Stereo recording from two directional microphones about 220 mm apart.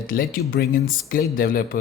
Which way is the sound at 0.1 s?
45° left (ahead or behind).